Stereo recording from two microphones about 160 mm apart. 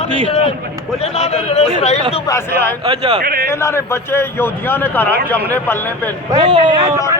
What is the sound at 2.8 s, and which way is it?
Speech, 25° right (ahead or behind).